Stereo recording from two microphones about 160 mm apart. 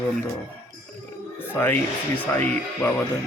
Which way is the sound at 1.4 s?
15° left (ahead or behind).